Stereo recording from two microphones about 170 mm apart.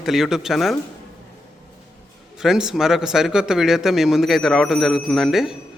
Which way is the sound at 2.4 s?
5° right (ahead or behind).